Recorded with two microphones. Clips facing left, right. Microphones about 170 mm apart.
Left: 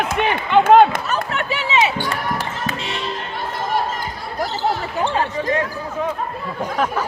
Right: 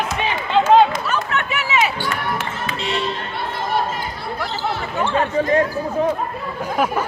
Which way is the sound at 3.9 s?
40° left (ahead or behind).